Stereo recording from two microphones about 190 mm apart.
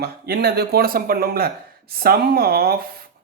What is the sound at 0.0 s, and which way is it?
Speech, 55° right (ahead or behind).